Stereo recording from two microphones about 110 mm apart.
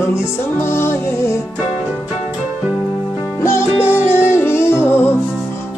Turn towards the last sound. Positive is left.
turn(degrees=20)  # may be behind; listen again after turning